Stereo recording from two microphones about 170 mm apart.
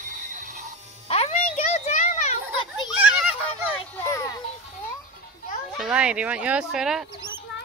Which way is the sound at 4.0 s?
15° left (ahead or behind).